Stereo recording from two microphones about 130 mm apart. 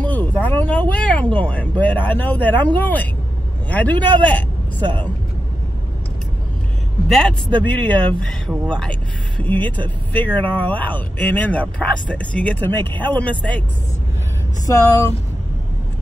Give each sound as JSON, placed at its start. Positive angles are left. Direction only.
{"t": 0.0, "sound": "a man's voice", "side_deg": 10}
{"t": 7.1, "sound": "speech", "side_deg": 5}
{"t": 14.7, "sound": "speech", "side_deg": 25}